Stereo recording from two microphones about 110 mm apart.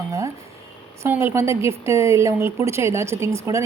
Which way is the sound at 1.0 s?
20° right (ahead or behind).